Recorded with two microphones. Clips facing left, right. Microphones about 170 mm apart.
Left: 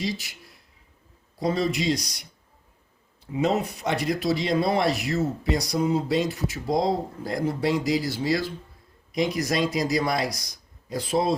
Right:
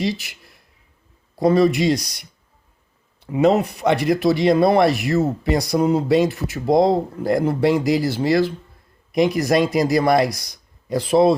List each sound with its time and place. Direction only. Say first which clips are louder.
0.0 s speech: right 6 dB; 65° right (ahead or behind)
1.4 s speech: right 9 dB; 60° right (ahead or behind)
3.2 s speech: right 8 dB; 65° right (ahead or behind)